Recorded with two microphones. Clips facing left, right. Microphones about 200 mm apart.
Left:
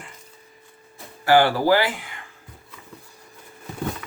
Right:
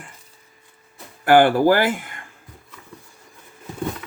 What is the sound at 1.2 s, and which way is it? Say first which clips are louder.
Speech: right 4 dB; 55° right (ahead or behind).